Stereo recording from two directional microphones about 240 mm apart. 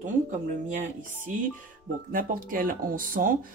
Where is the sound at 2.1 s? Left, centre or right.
Right.